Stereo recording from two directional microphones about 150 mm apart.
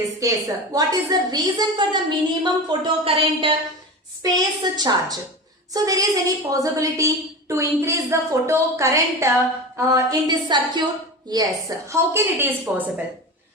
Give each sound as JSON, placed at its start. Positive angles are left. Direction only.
{"t": 0.2, "sound": "a woman's voice", "side_deg": -20}
{"t": 4.2, "sound": "a woman's voice", "side_deg": -25}
{"t": 11.9, "sound": "a woman's voice", "side_deg": -15}